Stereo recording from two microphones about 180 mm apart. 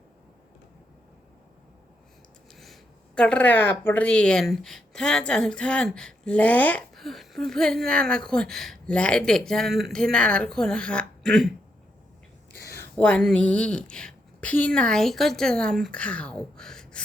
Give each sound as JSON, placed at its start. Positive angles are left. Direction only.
{"t": 2.5, "sound": "a sound", "side_deg": 0}
{"t": 3.2, "sound": "a woman's voice", "side_deg": 5}
{"t": 12.7, "sound": "a woman's voice", "side_deg": 10}